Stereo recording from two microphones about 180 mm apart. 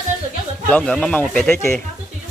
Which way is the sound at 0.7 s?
5° left (ahead or behind).